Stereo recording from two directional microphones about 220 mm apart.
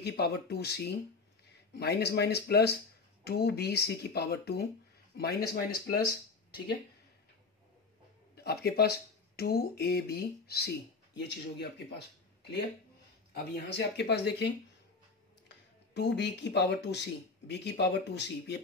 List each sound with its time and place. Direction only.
0.0 s speech: 45° left (ahead or behind)
8.4 s speech: 45° left (ahead or behind)
13.3 s speech: 45° left (ahead or behind)